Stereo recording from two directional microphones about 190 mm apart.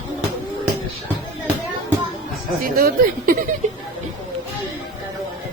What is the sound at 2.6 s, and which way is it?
Speech, 50° right (ahead or behind).